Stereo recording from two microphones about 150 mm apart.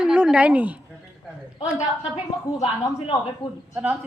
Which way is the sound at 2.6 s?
35° left (ahead or behind).